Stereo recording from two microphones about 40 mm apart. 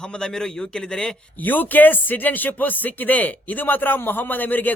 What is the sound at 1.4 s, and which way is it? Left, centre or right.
A man's voice, left.